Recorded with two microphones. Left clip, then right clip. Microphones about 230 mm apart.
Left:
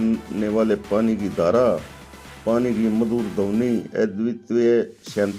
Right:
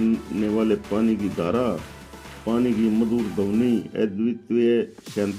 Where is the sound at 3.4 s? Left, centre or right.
Left.